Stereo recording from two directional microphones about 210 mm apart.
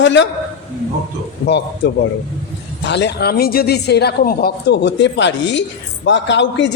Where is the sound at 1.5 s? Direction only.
55° left (ahead or behind).